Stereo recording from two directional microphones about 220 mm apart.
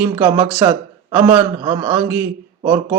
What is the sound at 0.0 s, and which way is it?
A man's voice, 10° right (ahead or behind).